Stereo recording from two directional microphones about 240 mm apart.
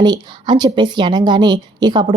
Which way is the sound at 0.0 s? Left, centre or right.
Centre.